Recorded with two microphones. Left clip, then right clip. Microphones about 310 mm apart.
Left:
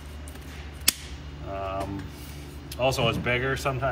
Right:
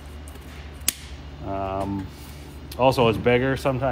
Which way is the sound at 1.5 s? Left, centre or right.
Right.